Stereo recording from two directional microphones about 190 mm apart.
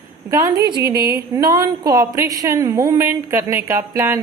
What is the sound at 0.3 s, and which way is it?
A woman's voice, 15° right (ahead or behind).